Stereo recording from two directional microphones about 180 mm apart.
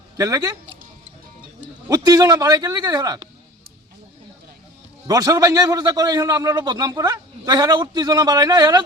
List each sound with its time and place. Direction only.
0.2 s a man's voice: 20° right (ahead or behind)
1.6 s a man's voice: 20° right (ahead or behind)
5.0 s a man's voice: 20° right (ahead or behind)